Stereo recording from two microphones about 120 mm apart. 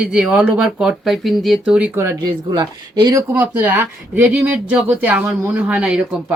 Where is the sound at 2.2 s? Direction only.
35° right (ahead or behind).